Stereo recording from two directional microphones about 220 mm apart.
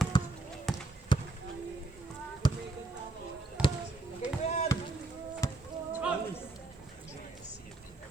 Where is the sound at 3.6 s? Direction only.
5° right (ahead or behind).